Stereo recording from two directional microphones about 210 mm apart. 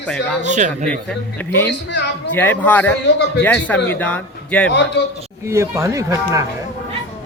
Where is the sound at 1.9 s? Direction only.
55° left (ahead or behind).